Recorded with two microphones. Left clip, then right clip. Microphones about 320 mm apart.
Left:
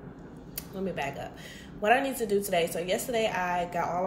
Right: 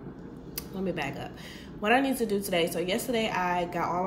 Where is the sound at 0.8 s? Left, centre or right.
Centre.